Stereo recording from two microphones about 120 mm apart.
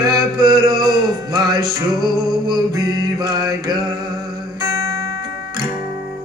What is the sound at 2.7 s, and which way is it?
Mantra, 30° right (ahead or behind).